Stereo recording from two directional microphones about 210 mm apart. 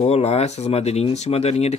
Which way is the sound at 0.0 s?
30° left (ahead or behind).